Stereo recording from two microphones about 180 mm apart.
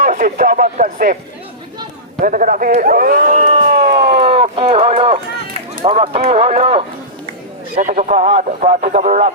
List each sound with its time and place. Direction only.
0.0 s speech: 45° right (ahead or behind)
2.2 s a man's voice: 50° right (ahead or behind)
3.9 s speech: 35° right (ahead or behind)
7.8 s speech: 45° right (ahead or behind)